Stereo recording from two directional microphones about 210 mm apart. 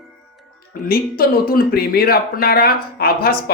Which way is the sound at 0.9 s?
45° left (ahead or behind).